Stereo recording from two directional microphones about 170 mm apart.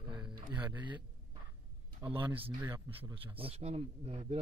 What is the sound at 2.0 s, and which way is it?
Speech, 20° right (ahead or behind).